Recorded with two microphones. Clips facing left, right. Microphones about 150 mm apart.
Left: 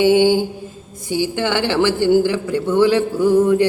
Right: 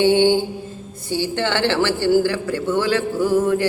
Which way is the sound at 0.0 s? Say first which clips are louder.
Left 2 dB; 10° left (ahead or behind).